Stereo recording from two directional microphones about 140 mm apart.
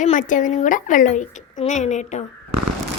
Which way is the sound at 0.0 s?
65° left (ahead or behind).